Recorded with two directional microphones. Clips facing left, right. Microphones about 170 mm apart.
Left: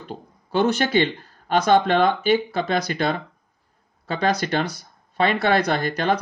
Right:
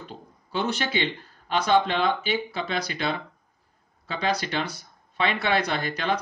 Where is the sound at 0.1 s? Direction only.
50° left (ahead or behind).